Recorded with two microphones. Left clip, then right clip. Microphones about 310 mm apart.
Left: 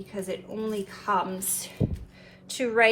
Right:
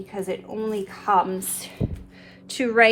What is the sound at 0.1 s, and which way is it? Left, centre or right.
Speech, right.